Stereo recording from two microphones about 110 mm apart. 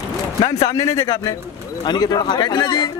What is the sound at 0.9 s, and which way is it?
Speech, 55° left (ahead or behind).